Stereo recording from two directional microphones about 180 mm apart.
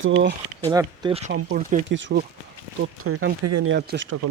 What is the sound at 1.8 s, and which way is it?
Speech, 90° right.